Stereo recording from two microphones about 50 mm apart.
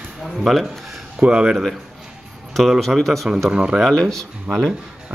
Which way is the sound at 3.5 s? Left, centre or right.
Centre.